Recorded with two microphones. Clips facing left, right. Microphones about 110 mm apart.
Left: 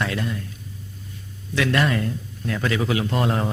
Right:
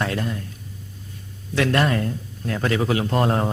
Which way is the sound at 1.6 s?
40° right (ahead or behind).